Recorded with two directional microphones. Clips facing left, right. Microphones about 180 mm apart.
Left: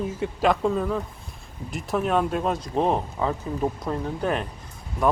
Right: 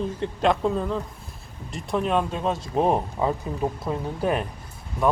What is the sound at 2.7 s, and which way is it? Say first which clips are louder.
Speech: right 3 dB; 10° right (ahead or behind).